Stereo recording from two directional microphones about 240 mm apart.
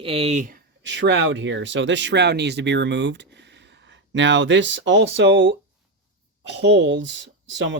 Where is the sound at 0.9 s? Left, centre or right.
Right.